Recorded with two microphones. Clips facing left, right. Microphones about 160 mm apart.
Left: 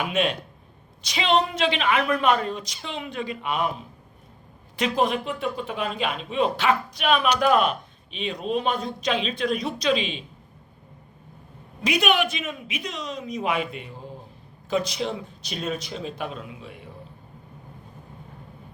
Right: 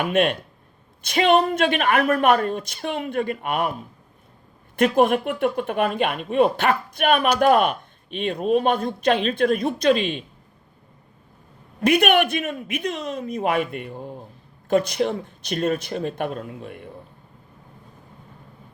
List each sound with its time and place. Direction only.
0.0 s speech: 55° right (ahead or behind)
4.8 s speech: 55° right (ahead or behind)
11.8 s speech: 55° right (ahead or behind)